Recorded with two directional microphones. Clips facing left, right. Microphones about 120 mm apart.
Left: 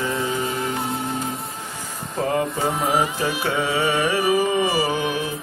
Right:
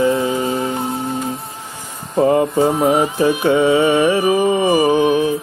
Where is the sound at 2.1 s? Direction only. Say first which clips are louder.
Right 9 dB; 25° right (ahead or behind).